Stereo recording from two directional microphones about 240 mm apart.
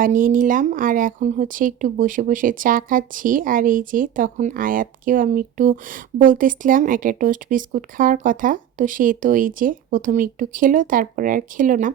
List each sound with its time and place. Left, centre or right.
0.0 s speech: right